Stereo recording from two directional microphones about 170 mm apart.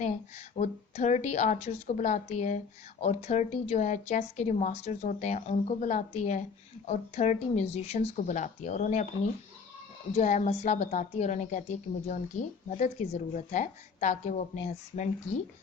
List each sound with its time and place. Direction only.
0.0 s speech: 45° left (ahead or behind)
10.2 s speech: 45° left (ahead or behind)